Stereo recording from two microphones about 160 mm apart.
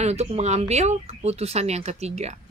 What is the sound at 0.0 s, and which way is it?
Speech, 40° right (ahead or behind).